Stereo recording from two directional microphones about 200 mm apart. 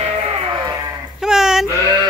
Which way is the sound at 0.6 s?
20° right (ahead or behind).